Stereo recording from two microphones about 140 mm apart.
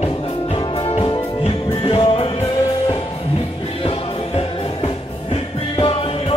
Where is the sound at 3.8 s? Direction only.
45° left (ahead or behind).